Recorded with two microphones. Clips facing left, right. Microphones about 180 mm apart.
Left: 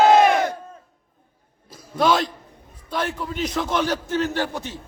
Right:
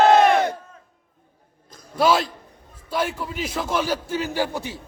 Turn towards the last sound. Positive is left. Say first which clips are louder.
# right 1 dB
turn(degrees=-10)  # may be behind; listen again after turning